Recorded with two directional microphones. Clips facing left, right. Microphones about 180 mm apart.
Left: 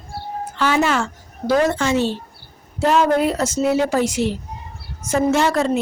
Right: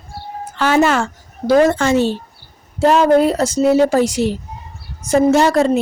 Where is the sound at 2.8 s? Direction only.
35° right (ahead or behind).